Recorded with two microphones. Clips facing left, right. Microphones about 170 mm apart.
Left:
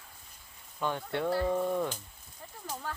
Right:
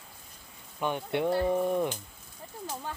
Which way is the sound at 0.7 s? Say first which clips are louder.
Right 3 dB; 15° right (ahead or behind).